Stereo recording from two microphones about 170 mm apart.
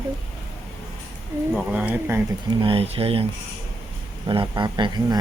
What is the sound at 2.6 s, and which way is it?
Speech, 35° right (ahead or behind).